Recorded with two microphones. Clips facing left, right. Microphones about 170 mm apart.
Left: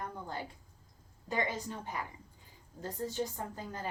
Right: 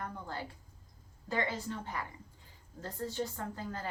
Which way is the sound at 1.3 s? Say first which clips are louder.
Even; 15° left (ahead or behind).